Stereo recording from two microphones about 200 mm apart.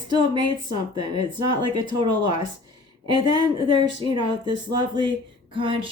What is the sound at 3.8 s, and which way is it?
Speech, 20° right (ahead or behind).